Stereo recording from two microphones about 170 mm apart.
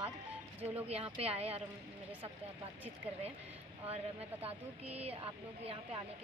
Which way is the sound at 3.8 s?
35° right (ahead or behind).